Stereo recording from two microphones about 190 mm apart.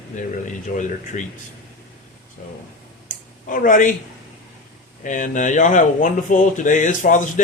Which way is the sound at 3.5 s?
45° left (ahead or behind).